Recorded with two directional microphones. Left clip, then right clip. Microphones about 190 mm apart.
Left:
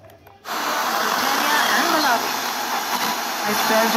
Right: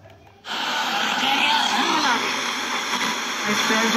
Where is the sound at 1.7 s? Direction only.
25° left (ahead or behind).